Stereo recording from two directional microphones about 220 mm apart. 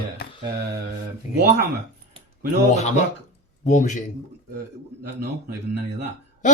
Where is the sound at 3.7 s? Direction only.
35° left (ahead or behind).